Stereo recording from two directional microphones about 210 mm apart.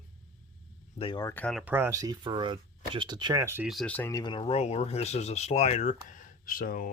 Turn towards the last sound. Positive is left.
turn(degrees=40)  # may be behind; listen again after turning